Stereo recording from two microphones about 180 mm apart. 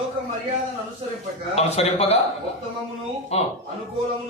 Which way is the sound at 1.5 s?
35° left (ahead or behind).